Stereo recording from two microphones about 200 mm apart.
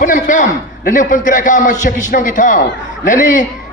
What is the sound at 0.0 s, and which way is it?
A man's voice, 40° left (ahead or behind).